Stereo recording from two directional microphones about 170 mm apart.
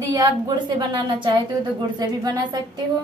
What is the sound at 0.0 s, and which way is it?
A woman's voice, 20° right (ahead or behind).